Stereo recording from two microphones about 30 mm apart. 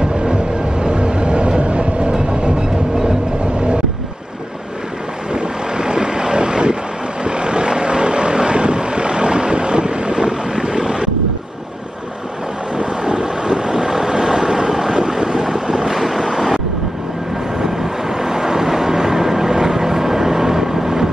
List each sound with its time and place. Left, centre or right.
0.0 s train: right
5.3 s vehicle: right
12.7 s vehicle: right; by 16.5 s centre
17.6 s vehicle: centre